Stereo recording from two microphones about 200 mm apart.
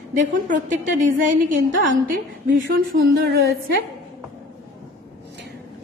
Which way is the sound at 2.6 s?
50° right (ahead or behind).